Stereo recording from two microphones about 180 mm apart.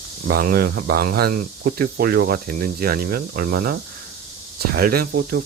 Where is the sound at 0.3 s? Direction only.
55° right (ahead or behind).